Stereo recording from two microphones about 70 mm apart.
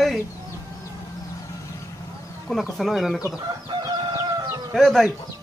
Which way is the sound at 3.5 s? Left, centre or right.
Right.